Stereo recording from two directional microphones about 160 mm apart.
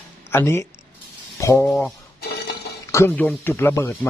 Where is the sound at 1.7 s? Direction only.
Centre (ahead or behind).